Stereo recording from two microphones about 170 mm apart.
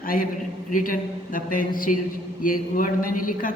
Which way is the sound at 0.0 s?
55° left (ahead or behind).